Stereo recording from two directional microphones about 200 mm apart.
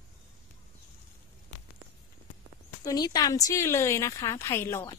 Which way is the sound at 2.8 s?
20° left (ahead or behind).